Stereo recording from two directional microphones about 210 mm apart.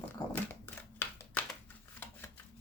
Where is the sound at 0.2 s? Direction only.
20° left (ahead or behind).